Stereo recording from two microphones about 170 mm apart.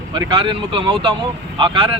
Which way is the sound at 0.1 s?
25° right (ahead or behind).